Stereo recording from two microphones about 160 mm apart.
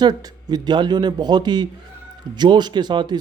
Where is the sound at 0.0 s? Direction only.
25° right (ahead or behind).